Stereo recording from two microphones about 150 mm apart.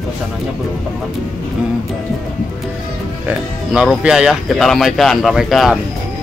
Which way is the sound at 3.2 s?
5° right (ahead or behind).